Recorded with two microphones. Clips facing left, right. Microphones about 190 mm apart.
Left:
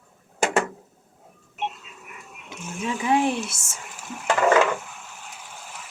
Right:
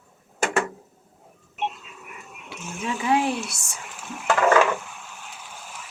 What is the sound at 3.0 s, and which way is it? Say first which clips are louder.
Speech: left 1 dB; 20° left (ahead or behind).